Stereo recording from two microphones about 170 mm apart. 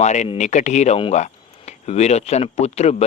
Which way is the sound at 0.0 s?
40° left (ahead or behind).